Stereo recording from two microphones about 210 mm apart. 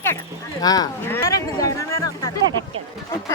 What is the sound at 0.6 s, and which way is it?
Speech, 20° left (ahead or behind).